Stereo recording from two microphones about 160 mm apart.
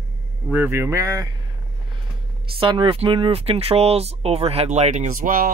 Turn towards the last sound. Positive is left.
turn(degrees=-60)  # may be behind; listen again after turning